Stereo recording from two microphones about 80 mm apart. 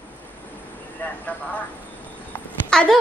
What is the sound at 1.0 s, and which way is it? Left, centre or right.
Speech, left.